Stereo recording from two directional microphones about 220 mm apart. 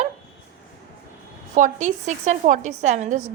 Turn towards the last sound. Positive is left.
turn(degrees=-30)  # may be behind; listen again after turning